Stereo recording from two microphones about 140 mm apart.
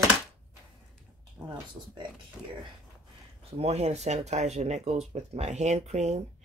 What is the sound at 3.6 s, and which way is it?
Speech, 50° right (ahead or behind).